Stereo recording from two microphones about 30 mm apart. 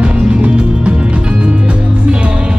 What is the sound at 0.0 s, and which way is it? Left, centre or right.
Music, right.